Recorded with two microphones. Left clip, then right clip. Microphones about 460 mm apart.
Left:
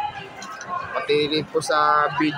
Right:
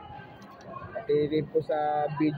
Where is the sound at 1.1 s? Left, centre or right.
Right.